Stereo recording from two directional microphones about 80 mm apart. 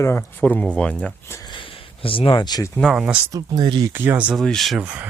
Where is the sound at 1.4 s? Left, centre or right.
Left.